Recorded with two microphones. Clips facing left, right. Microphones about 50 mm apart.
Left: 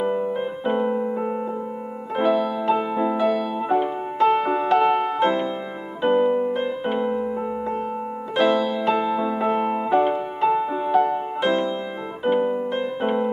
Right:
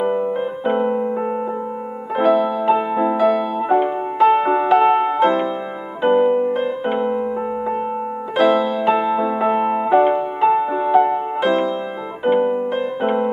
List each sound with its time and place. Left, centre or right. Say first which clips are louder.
0.0 s music: right 4 dB; centre
11.4 s music: right 3 dB; centre
12.3 s piano: right 4 dB; centre